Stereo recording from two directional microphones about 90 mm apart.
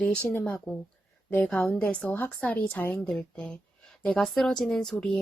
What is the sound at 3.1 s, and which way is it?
Speech, 5° left (ahead or behind).